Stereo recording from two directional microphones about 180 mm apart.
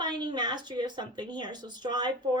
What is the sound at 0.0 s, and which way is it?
Speech, 25° right (ahead or behind).